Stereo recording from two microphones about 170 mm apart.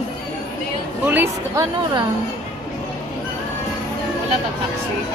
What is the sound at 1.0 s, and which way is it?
Speech, 10° right (ahead or behind).